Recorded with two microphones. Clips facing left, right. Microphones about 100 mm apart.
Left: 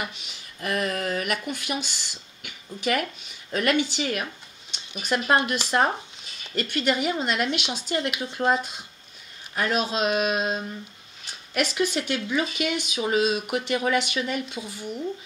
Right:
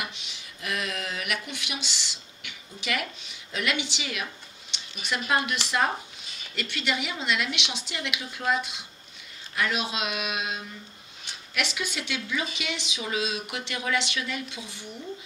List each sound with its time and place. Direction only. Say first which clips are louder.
0.0 s speech: left 3 dB; 45° left (ahead or behind)